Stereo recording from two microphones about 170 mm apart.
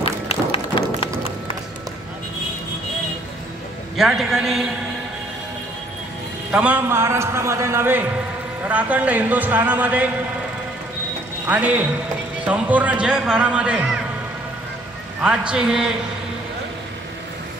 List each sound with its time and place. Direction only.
0.0 s run: 35° left (ahead or behind)
3.9 s a man's voice: centre (ahead or behind)
6.5 s a man's voice: 10° right (ahead or behind)
11.4 s a man's voice: 10° right (ahead or behind)
15.2 s a man's voice: 5° right (ahead or behind)